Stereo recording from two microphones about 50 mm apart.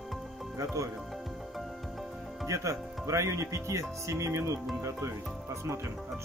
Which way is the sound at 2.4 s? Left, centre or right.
Right.